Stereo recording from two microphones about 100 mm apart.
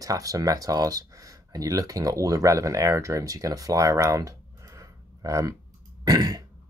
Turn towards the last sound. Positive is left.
turn(degrees=-40)  # may be behind; listen again after turning